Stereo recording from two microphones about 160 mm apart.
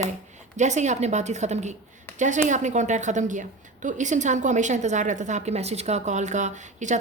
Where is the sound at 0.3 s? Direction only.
50° right (ahead or behind).